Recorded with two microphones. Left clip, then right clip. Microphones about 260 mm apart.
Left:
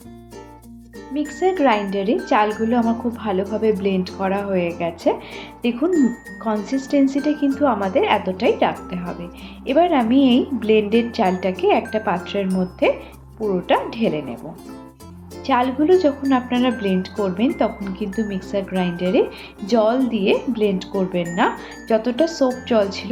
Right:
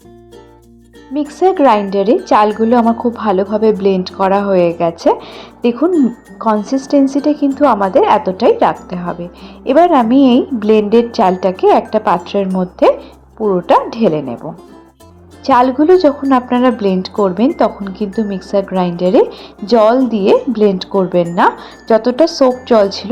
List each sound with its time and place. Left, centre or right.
1.1 s speech: right
15.4 s speech: right